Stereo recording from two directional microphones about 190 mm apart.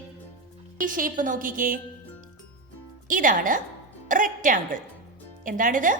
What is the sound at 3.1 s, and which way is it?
A woman's voice, 45° right (ahead or behind).